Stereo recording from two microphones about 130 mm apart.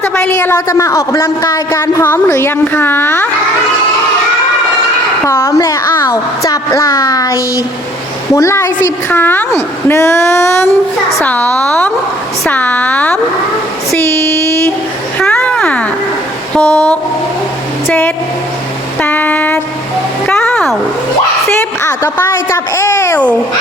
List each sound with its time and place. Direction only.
0.0 s a woman's voice: 15° left (ahead or behind)
5.2 s a woman's voice: 20° left (ahead or behind)
13.9 s a sound: 20° left (ahead or behind)
16.6 s speech: 15° left (ahead or behind)
18.9 s a sound: 15° left (ahead or behind)
21.6 s a child's voice: 20° left (ahead or behind)